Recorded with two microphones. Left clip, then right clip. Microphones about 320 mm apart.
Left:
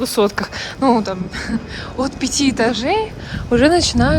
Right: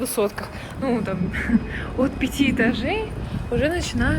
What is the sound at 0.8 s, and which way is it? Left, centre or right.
Speech, centre.